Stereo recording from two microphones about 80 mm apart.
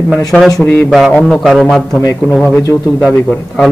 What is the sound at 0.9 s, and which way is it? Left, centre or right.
A man's voice, centre.